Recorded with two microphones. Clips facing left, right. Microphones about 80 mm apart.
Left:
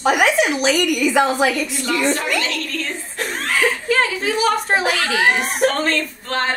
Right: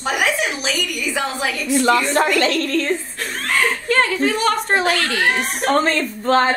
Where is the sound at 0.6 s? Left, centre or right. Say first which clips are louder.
Left 7 dB; left.